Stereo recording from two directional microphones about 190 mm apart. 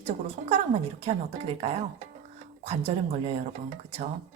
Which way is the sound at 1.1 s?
30° right (ahead or behind).